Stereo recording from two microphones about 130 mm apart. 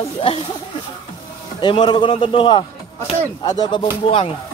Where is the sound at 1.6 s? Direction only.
35° left (ahead or behind).